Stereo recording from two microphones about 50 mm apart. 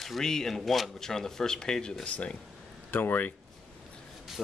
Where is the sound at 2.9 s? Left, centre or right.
Left.